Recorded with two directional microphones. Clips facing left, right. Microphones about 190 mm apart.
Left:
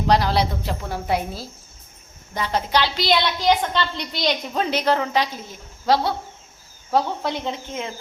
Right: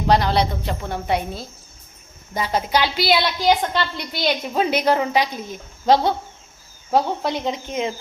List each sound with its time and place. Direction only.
0.1 s a woman's voice: centre (ahead or behind)
2.3 s a woman's voice: 10° right (ahead or behind)